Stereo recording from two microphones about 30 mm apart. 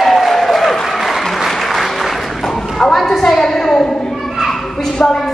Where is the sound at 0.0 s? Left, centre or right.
Centre.